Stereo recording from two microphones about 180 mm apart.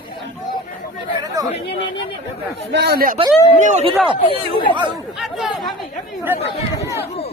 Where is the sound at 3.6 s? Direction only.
40° right (ahead or behind).